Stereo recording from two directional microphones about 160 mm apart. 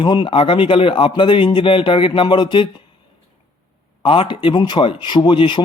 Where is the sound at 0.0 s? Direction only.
30° left (ahead or behind).